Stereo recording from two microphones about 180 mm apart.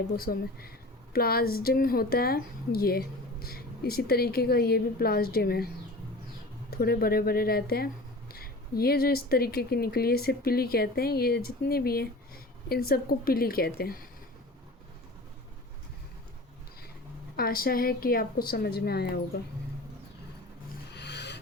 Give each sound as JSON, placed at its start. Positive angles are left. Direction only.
{"t": 0.2, "sound": "speech", "side_deg": 55}
{"t": 17.3, "sound": "speech", "side_deg": 55}
{"t": 20.9, "sound": "a sound", "side_deg": 70}